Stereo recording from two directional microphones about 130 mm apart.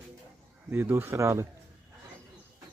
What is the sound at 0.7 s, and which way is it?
Speech, 15° right (ahead or behind).